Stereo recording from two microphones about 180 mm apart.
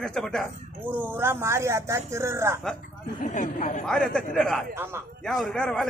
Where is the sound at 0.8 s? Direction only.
10° right (ahead or behind).